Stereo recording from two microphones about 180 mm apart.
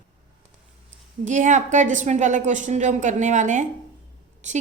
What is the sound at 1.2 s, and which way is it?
A woman's voice, 45° right (ahead or behind).